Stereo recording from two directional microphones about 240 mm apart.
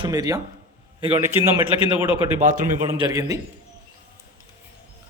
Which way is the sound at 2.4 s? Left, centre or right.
Right.